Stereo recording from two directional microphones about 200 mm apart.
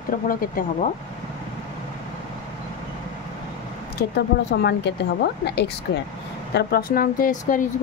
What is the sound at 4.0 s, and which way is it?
Speech, 55° left (ahead or behind).